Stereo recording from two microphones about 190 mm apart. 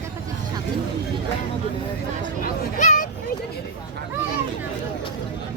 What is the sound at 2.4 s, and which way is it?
Speech, 40° left (ahead or behind).